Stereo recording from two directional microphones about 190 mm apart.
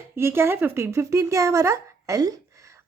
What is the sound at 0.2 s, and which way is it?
A woman's voice, 10° right (ahead or behind).